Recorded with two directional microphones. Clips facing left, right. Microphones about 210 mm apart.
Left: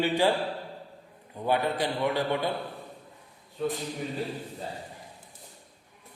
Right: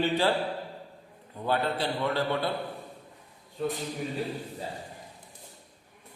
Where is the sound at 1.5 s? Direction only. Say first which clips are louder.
Left 1 dB; 15° left (ahead or behind).